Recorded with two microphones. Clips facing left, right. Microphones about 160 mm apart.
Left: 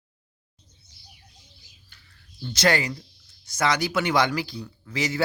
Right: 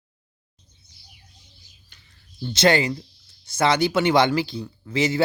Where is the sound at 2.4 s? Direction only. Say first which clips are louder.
Right 4 dB; 25° right (ahead or behind).